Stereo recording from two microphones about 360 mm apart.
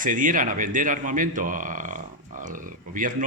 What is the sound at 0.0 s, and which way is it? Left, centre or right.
Speech, right.